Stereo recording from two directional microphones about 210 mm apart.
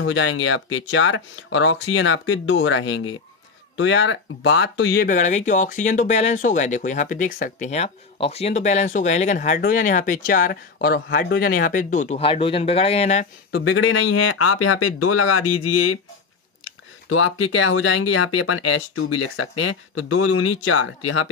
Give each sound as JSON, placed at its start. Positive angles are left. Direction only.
{"t": 0.0, "sound": "speech", "side_deg": 70}
{"t": 13.5, "sound": "speech", "side_deg": 50}
{"t": 13.7, "sound": "speech", "side_deg": 80}
{"t": 17.1, "sound": "speech", "side_deg": 70}